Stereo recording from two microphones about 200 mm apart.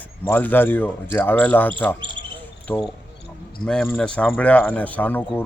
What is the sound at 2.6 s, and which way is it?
Speech, 10° left (ahead or behind).